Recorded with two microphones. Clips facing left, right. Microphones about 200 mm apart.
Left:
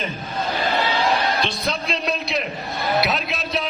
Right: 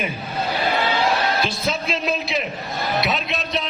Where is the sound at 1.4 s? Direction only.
5° right (ahead or behind).